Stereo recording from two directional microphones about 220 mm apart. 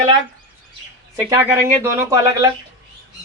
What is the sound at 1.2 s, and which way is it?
Speech, 15° right (ahead or behind).